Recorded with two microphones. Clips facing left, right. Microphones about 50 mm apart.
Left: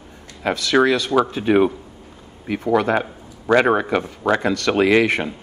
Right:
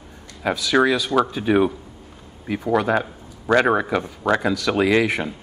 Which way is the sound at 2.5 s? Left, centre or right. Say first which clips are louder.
Left 2 dB; centre.